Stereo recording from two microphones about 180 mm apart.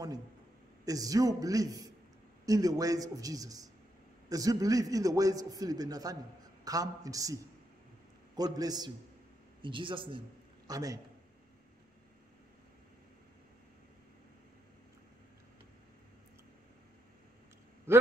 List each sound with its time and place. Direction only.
0.8 s a man's voice: 20° right (ahead or behind)
8.4 s a man's voice: 20° right (ahead or behind)